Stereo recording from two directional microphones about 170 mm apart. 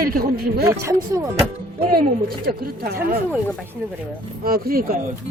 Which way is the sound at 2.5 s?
65° right (ahead or behind).